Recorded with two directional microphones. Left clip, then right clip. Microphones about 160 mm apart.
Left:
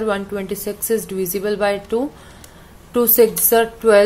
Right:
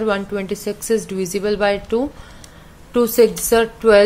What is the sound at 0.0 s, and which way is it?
A woman's voice, 5° right (ahead or behind).